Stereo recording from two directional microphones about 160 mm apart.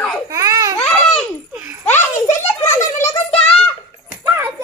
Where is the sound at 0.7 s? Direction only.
5° left (ahead or behind).